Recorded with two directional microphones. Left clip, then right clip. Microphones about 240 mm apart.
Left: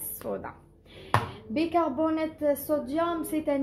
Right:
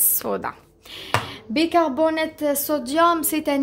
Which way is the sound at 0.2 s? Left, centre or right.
Right.